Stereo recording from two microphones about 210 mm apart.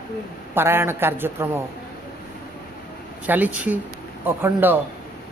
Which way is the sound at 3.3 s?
10° right (ahead or behind).